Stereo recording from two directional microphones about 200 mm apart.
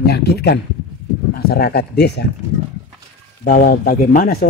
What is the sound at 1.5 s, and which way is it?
Speech, 50° left (ahead or behind).